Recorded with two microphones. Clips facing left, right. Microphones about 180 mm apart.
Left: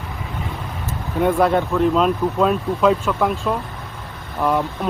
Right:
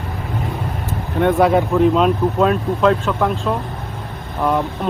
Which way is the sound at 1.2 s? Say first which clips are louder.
Right 2 dB; 5° right (ahead or behind).